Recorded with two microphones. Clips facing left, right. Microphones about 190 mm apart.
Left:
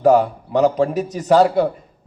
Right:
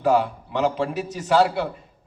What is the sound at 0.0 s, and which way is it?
A man's voice, 40° left (ahead or behind).